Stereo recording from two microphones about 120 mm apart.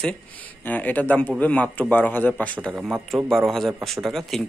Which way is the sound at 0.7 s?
15° left (ahead or behind).